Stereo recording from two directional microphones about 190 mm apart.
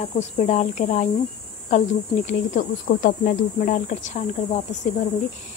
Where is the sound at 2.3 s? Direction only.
45° left (ahead or behind).